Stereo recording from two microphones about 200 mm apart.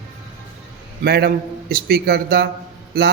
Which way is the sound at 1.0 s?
50° right (ahead or behind).